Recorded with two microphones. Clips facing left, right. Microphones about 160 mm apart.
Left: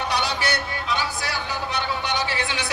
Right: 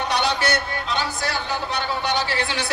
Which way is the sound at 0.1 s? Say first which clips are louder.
Right 5 dB; 10° left (ahead or behind).